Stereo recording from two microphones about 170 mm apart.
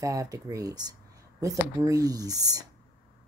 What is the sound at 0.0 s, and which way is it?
Speech, 20° right (ahead or behind).